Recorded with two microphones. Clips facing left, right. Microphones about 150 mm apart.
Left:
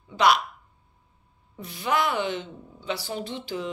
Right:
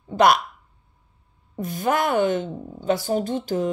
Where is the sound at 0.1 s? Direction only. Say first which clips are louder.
Right 4 dB; 50° right (ahead or behind).